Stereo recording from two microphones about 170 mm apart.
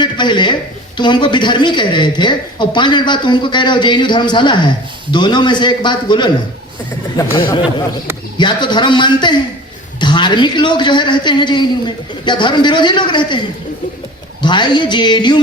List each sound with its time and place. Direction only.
0.0 s a sound: 25° left (ahead or behind)
0.9 s a woman's voice: 25° left (ahead or behind)
14.4 s a woman's voice: 25° left (ahead or behind)